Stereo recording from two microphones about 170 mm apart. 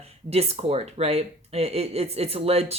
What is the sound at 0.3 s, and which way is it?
Speech, 35° right (ahead or behind).